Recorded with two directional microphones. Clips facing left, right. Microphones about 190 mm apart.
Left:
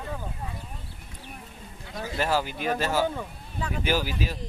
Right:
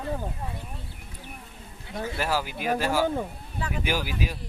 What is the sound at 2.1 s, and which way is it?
Speech, 10° right (ahead or behind).